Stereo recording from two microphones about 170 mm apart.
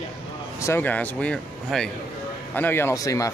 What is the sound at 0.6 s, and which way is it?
Speech, 15° left (ahead or behind).